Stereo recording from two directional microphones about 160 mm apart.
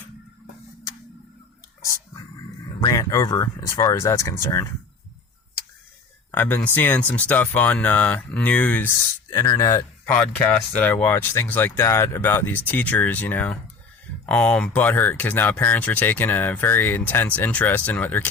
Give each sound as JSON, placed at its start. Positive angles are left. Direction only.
{"t": 2.8, "sound": "speech", "side_deg": 20}
{"t": 6.3, "sound": "speech", "side_deg": 10}